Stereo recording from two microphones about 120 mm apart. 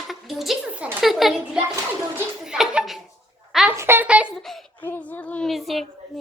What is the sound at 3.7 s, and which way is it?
Speech, 20° right (ahead or behind).